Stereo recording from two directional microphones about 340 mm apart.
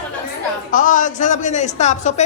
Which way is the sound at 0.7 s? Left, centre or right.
Left.